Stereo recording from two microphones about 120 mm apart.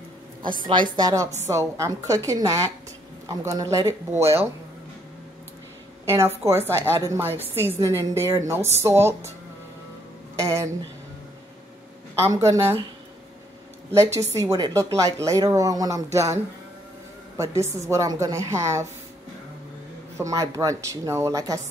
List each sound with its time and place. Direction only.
0.5 s a woman's voice: 40° right (ahead or behind); by 4.5 s 20° right (ahead or behind)
6.0 s a woman's voice: 25° right (ahead or behind)
10.3 s speech: 25° right (ahead or behind)
12.2 s a woman's voice: 25° right (ahead or behind)
13.9 s a woman's voice: 25° right (ahead or behind)
17.4 s a woman's voice: 25° right (ahead or behind)
20.2 s a woman's voice: 25° right (ahead or behind)